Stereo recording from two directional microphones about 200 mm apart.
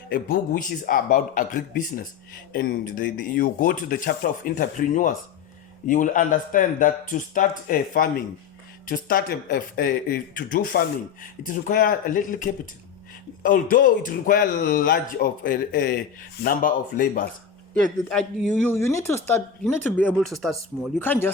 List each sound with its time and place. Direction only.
0.1 s a man's voice: 45° left (ahead or behind)
18.1 s speech: 5° left (ahead or behind)